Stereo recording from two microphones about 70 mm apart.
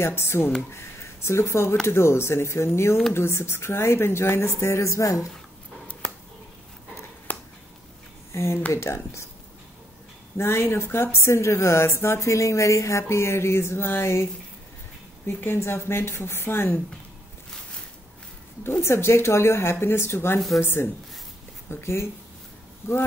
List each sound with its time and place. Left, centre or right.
0.0 s a woman's voice: left
7.3 s a sound: left
8.3 s a woman's voice: left
10.3 s a woman's voice: left
15.2 s a woman's voice: left
18.6 s a woman's voice: left
20.3 s speech: centre
20.6 s a woman's voice: left